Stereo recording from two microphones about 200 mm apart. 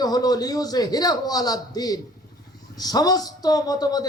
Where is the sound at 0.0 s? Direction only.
20° left (ahead or behind).